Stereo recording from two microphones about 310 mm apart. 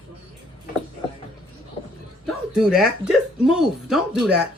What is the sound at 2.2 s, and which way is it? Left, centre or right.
Speech, centre.